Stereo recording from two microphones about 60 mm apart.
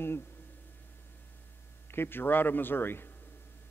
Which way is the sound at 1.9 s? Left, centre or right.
Left.